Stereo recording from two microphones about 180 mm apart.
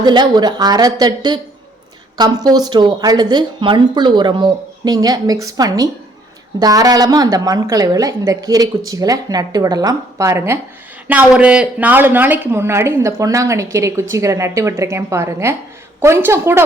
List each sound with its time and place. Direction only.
0.0 s a woman's voice: 25° right (ahead or behind)